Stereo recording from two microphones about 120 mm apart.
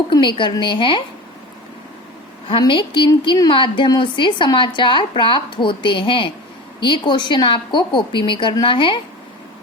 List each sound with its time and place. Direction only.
0.1 s speech: 40° left (ahead or behind)
2.5 s a woman's voice: 45° left (ahead or behind)
3.1 s a woman's voice: 35° left (ahead or behind)